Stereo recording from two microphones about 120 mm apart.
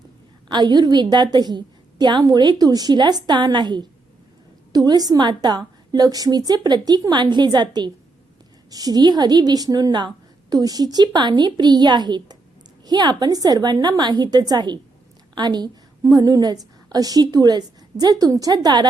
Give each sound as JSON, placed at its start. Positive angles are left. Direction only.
{"t": 0.4, "sound": "a woman's voice", "side_deg": -40}